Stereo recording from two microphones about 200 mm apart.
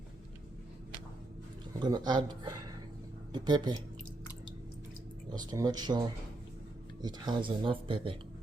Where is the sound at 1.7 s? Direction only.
20° right (ahead or behind).